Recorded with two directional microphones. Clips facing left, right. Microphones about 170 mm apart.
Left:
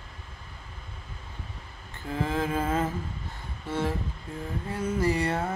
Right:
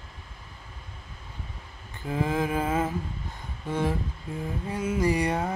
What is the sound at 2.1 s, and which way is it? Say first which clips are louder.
Music: right 2 dB; 15° right (ahead or behind).